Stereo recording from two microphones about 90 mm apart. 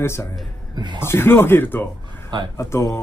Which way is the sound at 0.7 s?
60° right (ahead or behind).